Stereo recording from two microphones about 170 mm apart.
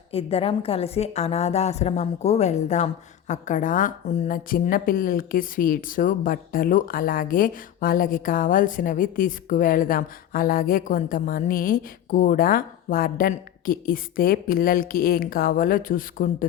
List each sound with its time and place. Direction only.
0.1 s a woman's voice: 35° left (ahead or behind); by 16.5 s 55° left (ahead or behind)